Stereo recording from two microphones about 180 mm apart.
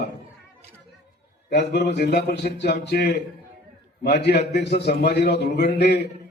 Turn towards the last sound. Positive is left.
turn(degrees=65)  # may be behind; listen again after turning